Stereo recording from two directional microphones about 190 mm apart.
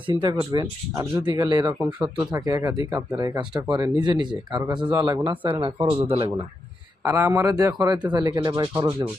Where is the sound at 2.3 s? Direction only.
20° right (ahead or behind).